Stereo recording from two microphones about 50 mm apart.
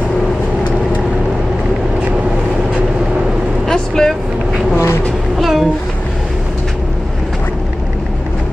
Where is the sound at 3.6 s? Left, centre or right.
Centre.